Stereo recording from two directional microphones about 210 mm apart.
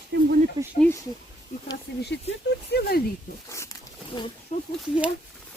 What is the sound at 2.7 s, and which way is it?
Speech, 50° left (ahead or behind).